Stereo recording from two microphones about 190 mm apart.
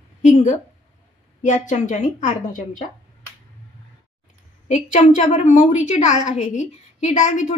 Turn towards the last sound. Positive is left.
turn(degrees=40)  # may be behind; listen again after turning